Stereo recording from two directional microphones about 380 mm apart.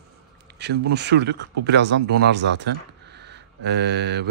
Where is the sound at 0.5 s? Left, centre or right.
Right.